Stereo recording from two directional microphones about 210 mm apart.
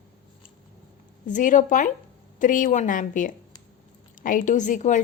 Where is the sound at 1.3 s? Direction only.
35° left (ahead or behind).